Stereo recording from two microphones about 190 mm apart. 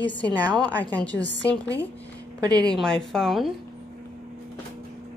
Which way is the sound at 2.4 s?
20° right (ahead or behind).